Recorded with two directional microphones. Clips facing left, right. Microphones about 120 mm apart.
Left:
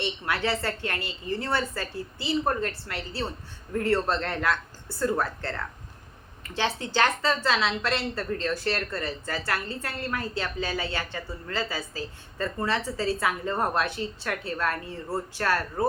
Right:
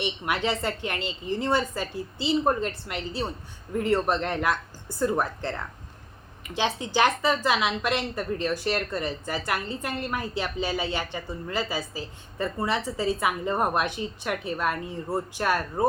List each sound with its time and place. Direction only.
0.0 s a woman's voice: 20° right (ahead or behind)